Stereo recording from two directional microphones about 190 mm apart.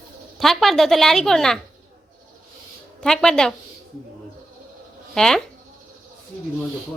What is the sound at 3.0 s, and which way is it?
Speech, 5° left (ahead or behind).